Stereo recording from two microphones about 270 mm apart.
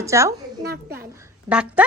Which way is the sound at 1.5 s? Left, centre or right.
Centre.